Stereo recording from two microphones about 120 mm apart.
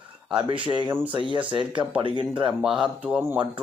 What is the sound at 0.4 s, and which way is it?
Speech, 45° right (ahead or behind).